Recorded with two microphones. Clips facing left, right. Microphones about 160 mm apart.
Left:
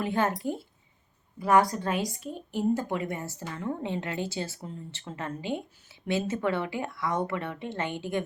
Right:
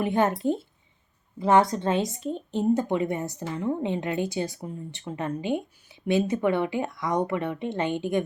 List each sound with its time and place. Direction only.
0.0 s a woman's voice: 20° right (ahead or behind)